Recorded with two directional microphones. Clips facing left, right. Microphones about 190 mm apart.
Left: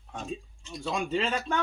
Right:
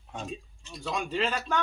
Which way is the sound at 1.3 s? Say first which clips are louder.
Even; 30° left (ahead or behind).